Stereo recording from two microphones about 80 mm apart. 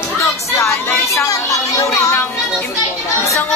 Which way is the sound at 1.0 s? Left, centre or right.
Left.